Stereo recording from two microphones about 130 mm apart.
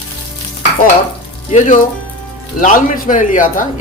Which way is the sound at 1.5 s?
75° left (ahead or behind).